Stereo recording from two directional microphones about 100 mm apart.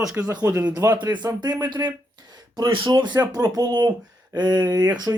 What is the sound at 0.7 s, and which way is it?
Speech, 35° right (ahead or behind).